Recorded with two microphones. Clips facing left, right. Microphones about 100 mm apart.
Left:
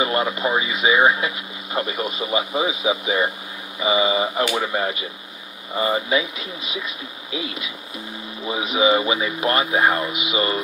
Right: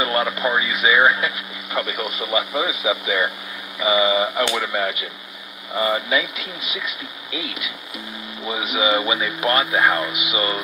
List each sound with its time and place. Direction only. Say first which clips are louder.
0.0 s speech: even; 25° left (ahead or behind)